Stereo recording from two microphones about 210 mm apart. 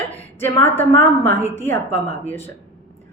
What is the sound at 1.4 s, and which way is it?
Speech, 30° left (ahead or behind).